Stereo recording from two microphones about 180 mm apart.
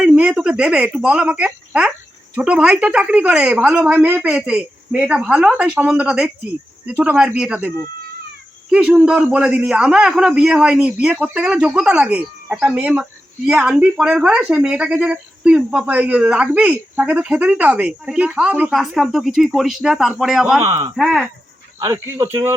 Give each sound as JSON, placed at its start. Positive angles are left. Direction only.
{"t": 0.0, "sound": "a man's voice", "side_deg": -10}
{"t": 8.7, "sound": "a man's voice", "side_deg": -5}
{"t": 20.6, "sound": "speech", "side_deg": -15}
{"t": 20.9, "sound": "a man's voice", "side_deg": 0}
{"t": 21.8, "sound": "speech", "side_deg": -15}